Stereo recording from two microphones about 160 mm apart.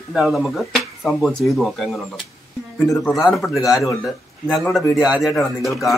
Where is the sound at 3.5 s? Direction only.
20° left (ahead or behind).